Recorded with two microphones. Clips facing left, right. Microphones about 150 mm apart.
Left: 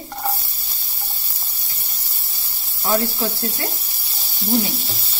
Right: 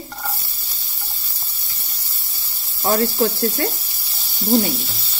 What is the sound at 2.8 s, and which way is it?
Speech, 50° right (ahead or behind).